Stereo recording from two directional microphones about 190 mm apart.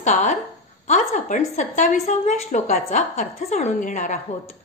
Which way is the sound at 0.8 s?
40° left (ahead or behind).